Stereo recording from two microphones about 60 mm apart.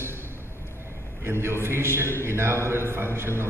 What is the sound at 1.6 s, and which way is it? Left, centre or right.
Mantra, right.